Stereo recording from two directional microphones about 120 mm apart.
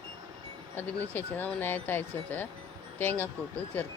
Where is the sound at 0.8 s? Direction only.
15° left (ahead or behind).